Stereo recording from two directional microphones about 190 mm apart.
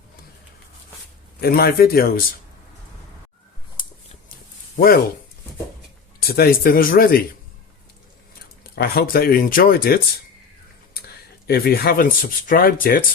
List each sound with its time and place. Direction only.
1.4 s speech: 55° left (ahead or behind)
6.1 s speech: 55° left (ahead or behind)
8.6 s speech: 55° left (ahead or behind)
11.4 s speech: 55° left (ahead or behind)